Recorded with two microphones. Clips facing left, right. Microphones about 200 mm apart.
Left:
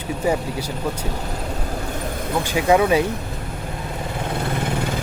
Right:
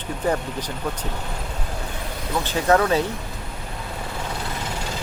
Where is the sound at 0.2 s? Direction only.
10° left (ahead or behind).